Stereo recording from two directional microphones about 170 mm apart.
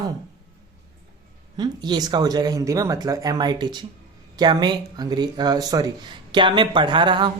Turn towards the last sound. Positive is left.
turn(degrees=-25)  # may be behind; listen again after turning